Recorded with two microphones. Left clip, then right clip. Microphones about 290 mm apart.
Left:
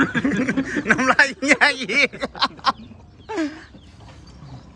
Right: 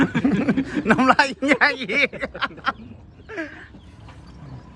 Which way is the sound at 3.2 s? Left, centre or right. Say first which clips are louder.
Left 6 dB; centre.